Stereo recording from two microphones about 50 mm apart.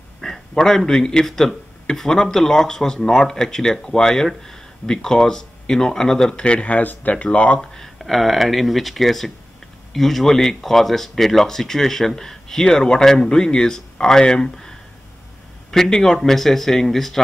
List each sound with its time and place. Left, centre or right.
0.2 s speech: centre
6.4 s speech: left
7.5 s speech: centre